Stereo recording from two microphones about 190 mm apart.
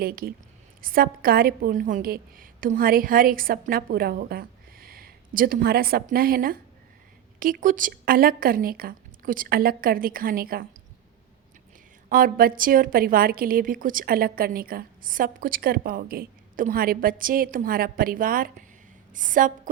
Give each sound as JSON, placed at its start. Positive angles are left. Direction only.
{"t": 0.0, "sound": "a woman's voice", "side_deg": -50}
{"t": 12.0, "sound": "a woman's voice", "side_deg": -50}